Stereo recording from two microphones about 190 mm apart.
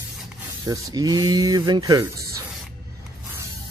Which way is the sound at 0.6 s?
20° right (ahead or behind).